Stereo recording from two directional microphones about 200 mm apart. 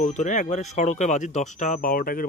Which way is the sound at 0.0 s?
40° left (ahead or behind).